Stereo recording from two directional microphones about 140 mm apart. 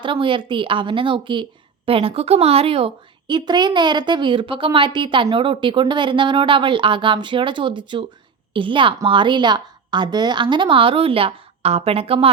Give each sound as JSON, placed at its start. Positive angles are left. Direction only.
{"t": 0.0, "sound": "a woman's voice", "side_deg": -35}